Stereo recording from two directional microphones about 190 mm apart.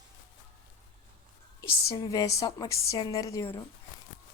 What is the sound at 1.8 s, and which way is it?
A woman's voice, 20° left (ahead or behind).